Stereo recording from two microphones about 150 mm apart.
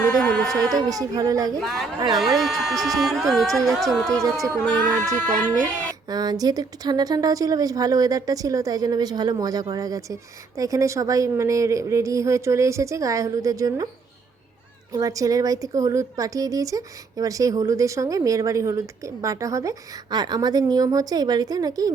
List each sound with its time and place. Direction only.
0.2 s a sound: 5° left (ahead or behind)
0.7 s speech: 25° right (ahead or behind)
1.6 s speech: centre (ahead or behind)
4.2 s speech: 20° right (ahead or behind)
4.6 s speech: 5° left (ahead or behind)
6.1 s speech: 25° right (ahead or behind)
14.9 s speech: 25° right (ahead or behind)